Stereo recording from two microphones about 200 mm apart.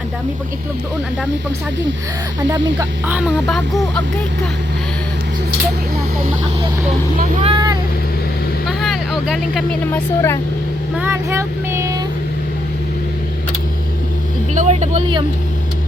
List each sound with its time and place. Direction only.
3.1 s speech: 5° right (ahead or behind)
7.4 s vehicle: 20° right (ahead or behind)
8.6 s vehicle: centre (ahead or behind)
9.8 s speech: 10° left (ahead or behind)
10.9 s speech: 10° right (ahead or behind)
14.5 s speech: 35° right (ahead or behind)